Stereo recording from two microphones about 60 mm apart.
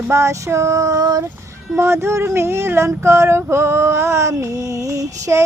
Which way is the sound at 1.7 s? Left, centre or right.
Right.